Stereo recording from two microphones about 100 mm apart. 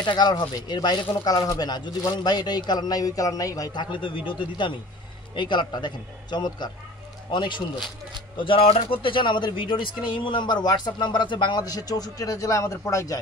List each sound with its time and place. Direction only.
0.0 s speech: 45° left (ahead or behind)
3.9 s speech: 60° left (ahead or behind); by 13.2 s 35° left (ahead or behind)